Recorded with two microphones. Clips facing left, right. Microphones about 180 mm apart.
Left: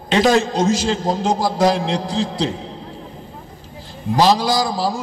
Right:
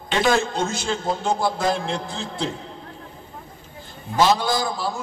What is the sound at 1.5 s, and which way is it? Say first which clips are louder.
A man's voice: left 6 dB; 90° left.